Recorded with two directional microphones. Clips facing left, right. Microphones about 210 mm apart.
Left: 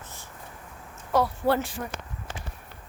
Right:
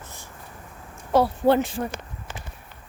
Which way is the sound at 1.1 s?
25° right (ahead or behind).